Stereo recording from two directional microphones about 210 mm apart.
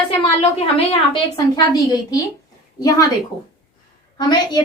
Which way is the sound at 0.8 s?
25° left (ahead or behind).